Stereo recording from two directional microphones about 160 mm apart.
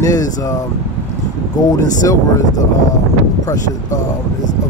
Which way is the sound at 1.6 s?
20° left (ahead or behind).